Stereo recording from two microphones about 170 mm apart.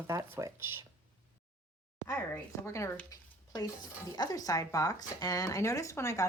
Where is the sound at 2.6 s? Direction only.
15° left (ahead or behind).